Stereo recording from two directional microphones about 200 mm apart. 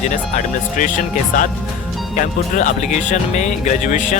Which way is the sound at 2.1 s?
40° left (ahead or behind).